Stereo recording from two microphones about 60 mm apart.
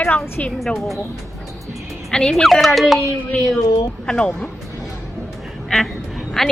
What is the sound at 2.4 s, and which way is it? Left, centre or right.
Speech, centre.